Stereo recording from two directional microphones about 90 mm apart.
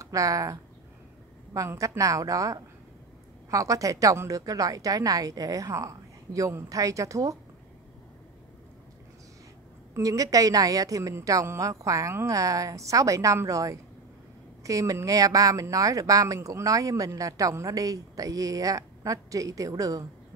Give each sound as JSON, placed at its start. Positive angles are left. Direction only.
{"t": 0.0, "sound": "a woman's voice", "side_deg": -40}
{"t": 9.9, "sound": "a woman's voice", "side_deg": -40}